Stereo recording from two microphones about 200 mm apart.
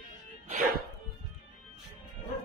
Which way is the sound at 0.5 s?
45° right (ahead or behind).